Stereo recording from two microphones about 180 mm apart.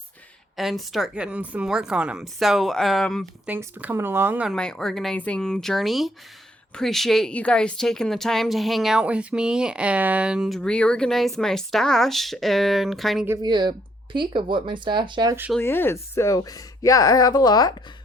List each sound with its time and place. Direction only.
0.5 s speech: centre (ahead or behind)
3.4 s speech: 10° right (ahead or behind)
4.5 s speech: 5° left (ahead or behind)
13.2 s speech: 20° right (ahead or behind)
15.5 s speech: 10° left (ahead or behind)